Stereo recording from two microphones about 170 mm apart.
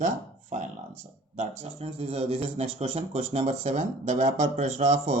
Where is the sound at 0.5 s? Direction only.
45° right (ahead or behind).